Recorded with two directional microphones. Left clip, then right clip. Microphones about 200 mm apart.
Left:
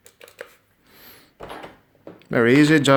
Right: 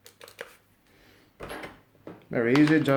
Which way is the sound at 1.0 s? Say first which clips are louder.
Left 10 dB; 50° left (ahead or behind).